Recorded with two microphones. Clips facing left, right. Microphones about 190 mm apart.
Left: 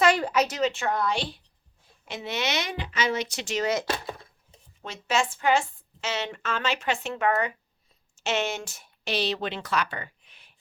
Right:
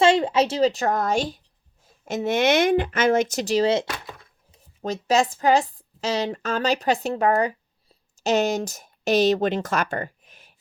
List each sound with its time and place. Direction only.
0.0 s speech: 25° right (ahead or behind)
3.8 s a sound: 30° left (ahead or behind)
4.8 s a woman's voice: 40° right (ahead or behind)